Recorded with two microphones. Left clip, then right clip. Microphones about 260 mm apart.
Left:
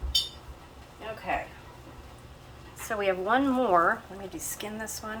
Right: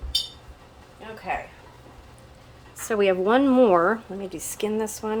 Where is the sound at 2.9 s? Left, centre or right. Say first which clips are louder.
Right 6 dB; right.